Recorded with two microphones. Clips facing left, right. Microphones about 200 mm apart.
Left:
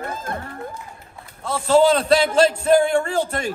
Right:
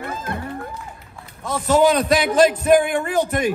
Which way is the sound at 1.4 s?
15° right (ahead or behind).